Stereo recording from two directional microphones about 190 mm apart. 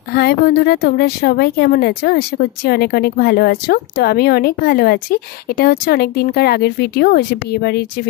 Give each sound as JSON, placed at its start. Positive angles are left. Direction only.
{"t": 0.1, "sound": "a woman's voice", "side_deg": 55}